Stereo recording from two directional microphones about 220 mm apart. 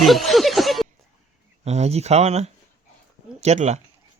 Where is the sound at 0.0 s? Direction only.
Centre (ahead or behind).